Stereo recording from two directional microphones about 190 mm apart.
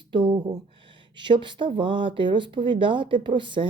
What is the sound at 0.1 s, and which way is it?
Speech, 25° right (ahead or behind).